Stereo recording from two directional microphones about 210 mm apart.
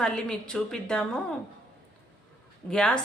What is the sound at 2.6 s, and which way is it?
Speech, 5° left (ahead or behind).